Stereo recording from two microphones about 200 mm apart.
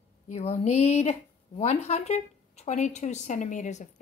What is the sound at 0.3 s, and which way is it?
A woman's voice, 35° left (ahead or behind).